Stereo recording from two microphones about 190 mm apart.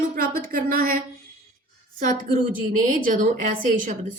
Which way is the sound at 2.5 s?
45° right (ahead or behind).